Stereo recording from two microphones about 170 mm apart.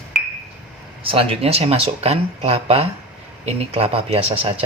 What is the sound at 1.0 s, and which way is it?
Speech, 35° right (ahead or behind).